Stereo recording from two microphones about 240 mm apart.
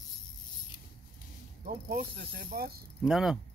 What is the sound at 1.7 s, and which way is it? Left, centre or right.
Pulleys, right.